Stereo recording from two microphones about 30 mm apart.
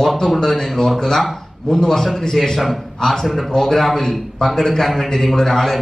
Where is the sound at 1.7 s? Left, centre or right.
Left.